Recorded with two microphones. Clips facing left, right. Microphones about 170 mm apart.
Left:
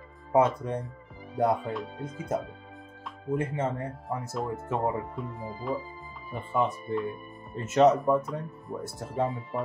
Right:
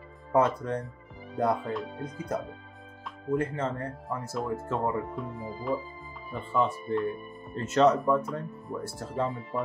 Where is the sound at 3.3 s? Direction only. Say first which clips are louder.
Even; 20° left (ahead or behind).